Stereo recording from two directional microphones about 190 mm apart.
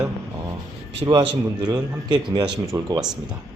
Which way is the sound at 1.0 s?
20° right (ahead or behind).